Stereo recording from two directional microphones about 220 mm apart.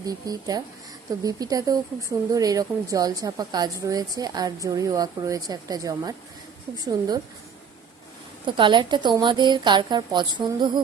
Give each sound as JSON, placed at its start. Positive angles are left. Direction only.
{"t": 0.0, "sound": "a woman's voice", "side_deg": -15}
{"t": 8.4, "sound": "a woman's voice", "side_deg": -20}